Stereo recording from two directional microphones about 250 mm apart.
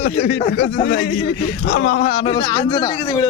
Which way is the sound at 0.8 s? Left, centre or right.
Left.